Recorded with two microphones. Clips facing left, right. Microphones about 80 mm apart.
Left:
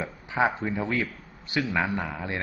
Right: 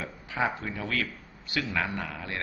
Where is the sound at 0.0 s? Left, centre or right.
Left.